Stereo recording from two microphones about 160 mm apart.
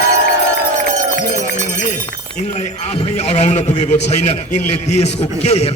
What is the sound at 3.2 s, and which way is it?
A man's voice, 45° left (ahead or behind).